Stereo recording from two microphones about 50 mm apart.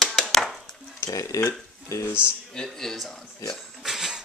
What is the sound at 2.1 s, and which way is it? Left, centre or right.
Speech, left.